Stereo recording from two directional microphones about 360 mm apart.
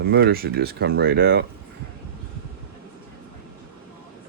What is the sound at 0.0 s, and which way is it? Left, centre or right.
Speech, right.